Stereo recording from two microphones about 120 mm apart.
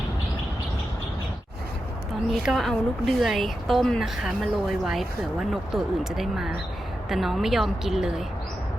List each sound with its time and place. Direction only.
2.3 s a woman's voice: centre (ahead or behind)